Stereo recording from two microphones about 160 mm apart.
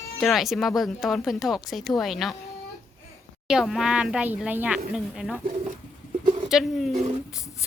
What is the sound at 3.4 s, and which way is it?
Speech, 5° right (ahead or behind).